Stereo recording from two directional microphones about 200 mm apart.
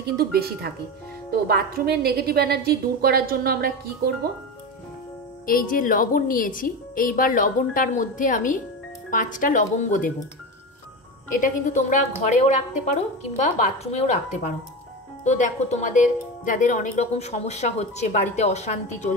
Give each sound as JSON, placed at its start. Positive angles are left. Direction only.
{"t": 0.0, "sound": "a woman's voice", "side_deg": -50}
{"t": 5.5, "sound": "a woman's voice", "side_deg": 45}
{"t": 11.4, "sound": "speech", "side_deg": 40}